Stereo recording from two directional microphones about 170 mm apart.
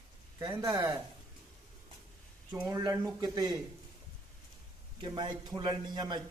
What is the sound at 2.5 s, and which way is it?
Speech, 20° right (ahead or behind).